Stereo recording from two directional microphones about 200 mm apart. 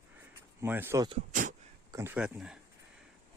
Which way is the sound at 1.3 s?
40° right (ahead or behind).